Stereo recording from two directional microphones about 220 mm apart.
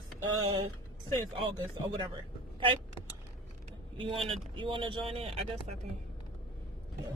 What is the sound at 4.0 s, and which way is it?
Speech, 25° right (ahead or behind).